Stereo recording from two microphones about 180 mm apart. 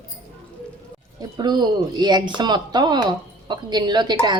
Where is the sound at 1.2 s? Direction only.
25° right (ahead or behind).